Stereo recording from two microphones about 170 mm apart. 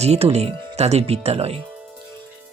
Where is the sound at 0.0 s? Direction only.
40° right (ahead or behind).